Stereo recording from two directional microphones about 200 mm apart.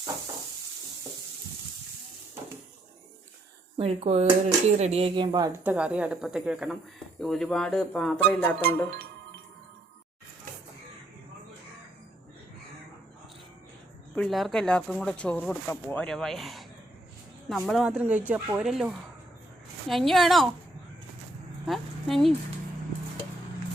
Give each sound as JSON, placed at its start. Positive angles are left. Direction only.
{"t": 3.8, "sound": "speech", "side_deg": -30}
{"t": 5.6, "sound": "speech", "side_deg": -5}
{"t": 14.2, "sound": "speech", "side_deg": 0}
{"t": 21.7, "sound": "a sound", "side_deg": 0}